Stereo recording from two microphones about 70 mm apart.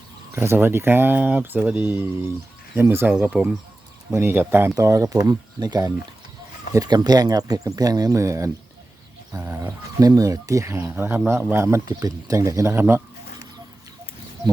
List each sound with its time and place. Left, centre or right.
0.3 s speech: right
1.8 s speech: right
3.2 s speech: centre
4.1 s speech: right
4.8 s speech: right
9.3 s a sound: right
10.0 s speech: right
10.9 s speech: right
11.5 s speech: right